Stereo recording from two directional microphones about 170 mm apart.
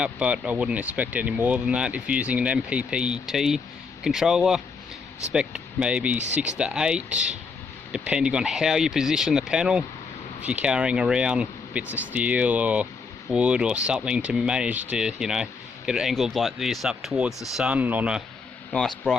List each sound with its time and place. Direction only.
0.0 s speech: 5° right (ahead or behind)
18.7 s speech: 5° left (ahead or behind)